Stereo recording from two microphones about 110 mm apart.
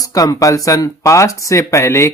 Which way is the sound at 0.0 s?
35° left (ahead or behind).